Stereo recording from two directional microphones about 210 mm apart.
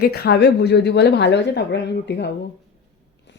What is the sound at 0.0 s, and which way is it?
A woman's voice, 50° left (ahead or behind).